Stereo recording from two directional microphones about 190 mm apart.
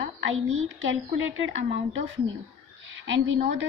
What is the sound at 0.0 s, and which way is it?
A woman's voice, 90° right.